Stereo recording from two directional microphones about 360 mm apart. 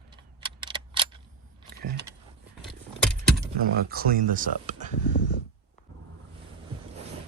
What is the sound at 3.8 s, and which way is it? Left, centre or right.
Speech, right.